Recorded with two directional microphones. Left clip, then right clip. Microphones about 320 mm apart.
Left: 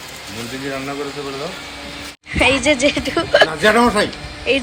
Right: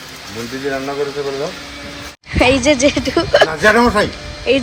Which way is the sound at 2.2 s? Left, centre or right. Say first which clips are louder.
Right 2 dB; centre.